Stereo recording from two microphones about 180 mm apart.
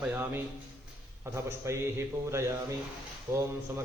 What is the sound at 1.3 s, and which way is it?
A man's voice, 15° right (ahead or behind).